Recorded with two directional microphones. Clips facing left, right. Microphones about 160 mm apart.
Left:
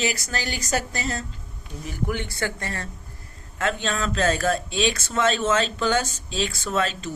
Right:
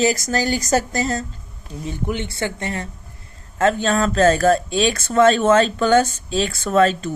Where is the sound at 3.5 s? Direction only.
40° right (ahead or behind).